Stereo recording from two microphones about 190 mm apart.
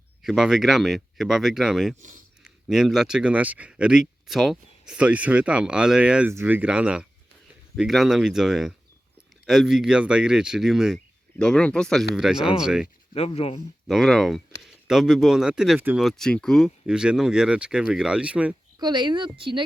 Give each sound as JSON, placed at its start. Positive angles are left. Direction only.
{"t": 0.2, "sound": "speech", "side_deg": 0}
{"t": 2.0, "sound": "speech", "side_deg": -40}
{"t": 2.4, "sound": "speech", "side_deg": 0}
{"t": 13.1, "sound": "speech", "side_deg": 35}
{"t": 13.8, "sound": "speech", "side_deg": 0}
{"t": 18.8, "sound": "speech", "side_deg": -25}